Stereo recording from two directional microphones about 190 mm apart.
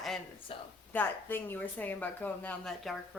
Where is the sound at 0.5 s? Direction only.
30° left (ahead or behind).